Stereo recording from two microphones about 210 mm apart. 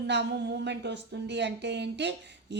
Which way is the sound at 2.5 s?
55° right (ahead or behind).